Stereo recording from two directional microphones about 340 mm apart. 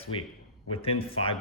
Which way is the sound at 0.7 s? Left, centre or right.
Centre.